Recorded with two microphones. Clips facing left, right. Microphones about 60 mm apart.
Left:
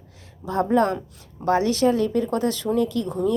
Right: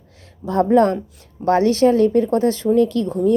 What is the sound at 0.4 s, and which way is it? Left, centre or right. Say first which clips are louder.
A woman's voice: right 5 dB; right.